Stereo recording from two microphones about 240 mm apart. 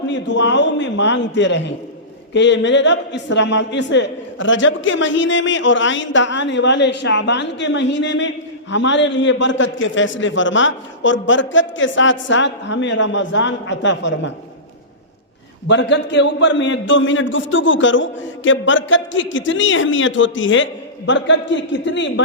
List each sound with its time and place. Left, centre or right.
0.1 s a man's voice: left
15.6 s a man's voice: left